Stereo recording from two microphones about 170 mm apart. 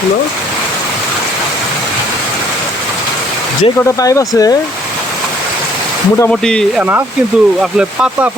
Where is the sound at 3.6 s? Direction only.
20° left (ahead or behind).